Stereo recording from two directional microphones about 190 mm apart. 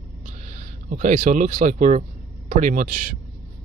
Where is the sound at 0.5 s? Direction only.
40° right (ahead or behind).